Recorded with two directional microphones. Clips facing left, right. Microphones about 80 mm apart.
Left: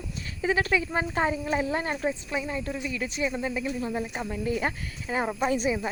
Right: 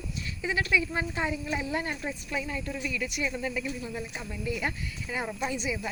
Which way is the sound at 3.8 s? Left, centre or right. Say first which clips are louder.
Left 6 dB; left.